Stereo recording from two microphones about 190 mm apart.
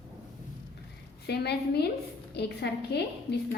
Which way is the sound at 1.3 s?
60° left (ahead or behind).